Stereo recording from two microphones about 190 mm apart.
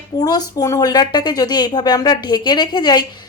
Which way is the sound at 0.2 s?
20° left (ahead or behind).